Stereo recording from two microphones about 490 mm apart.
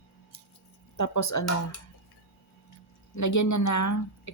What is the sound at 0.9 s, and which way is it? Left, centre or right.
Speech, left.